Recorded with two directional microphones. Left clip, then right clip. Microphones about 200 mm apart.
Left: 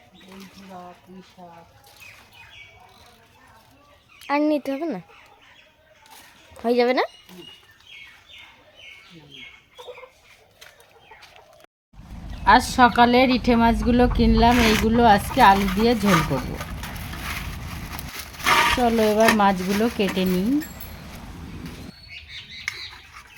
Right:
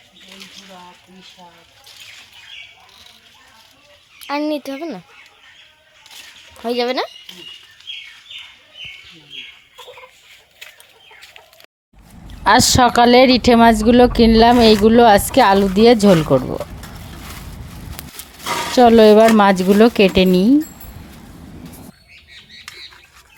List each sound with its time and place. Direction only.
4.2 s a child's voice: centre (ahead or behind)
6.6 s a child's voice: centre (ahead or behind)
12.5 s a woman's voice: 50° right (ahead or behind)
18.1 s a sound: centre (ahead or behind)
18.8 s a woman's voice: 45° right (ahead or behind)